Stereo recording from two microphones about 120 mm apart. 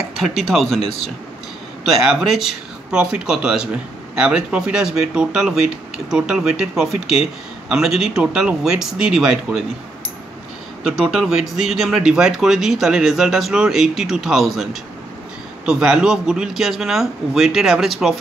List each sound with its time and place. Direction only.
0.2 s speech: centre (ahead or behind)
1.9 s speech: centre (ahead or behind)
10.8 s speech: 5° right (ahead or behind)